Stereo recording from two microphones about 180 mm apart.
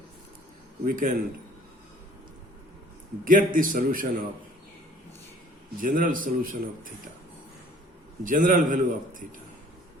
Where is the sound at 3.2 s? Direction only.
50° right (ahead or behind).